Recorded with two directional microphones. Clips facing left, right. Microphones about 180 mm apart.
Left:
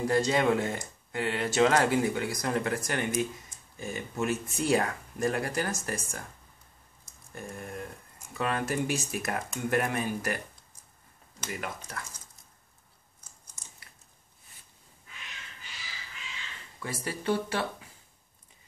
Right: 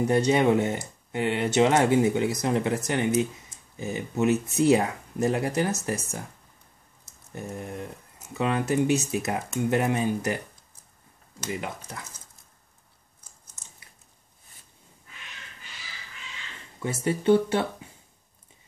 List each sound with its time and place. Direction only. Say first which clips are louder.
0.0 s speech: right 4 dB; 20° right (ahead or behind)
7.3 s speech: right 4 dB; 20° right (ahead or behind)
16.8 s speech: right 8 dB; 25° right (ahead or behind)